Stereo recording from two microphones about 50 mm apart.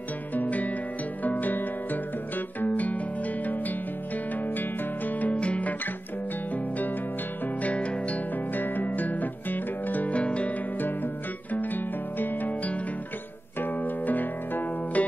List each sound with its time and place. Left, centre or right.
0.3 s music: left
4.5 s guitar: left
7.4 s music: left
8.5 s music: left
10.8 s music: left
11.5 s guitar: left
13.6 s music: left